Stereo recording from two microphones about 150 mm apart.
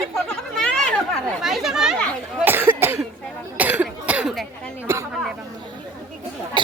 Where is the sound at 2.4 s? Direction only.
15° right (ahead or behind).